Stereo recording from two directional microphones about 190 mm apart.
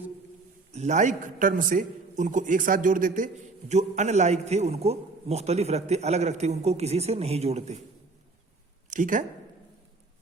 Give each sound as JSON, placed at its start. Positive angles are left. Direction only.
{"t": 0.7, "sound": "a man's voice", "side_deg": -40}
{"t": 8.9, "sound": "speech", "side_deg": -45}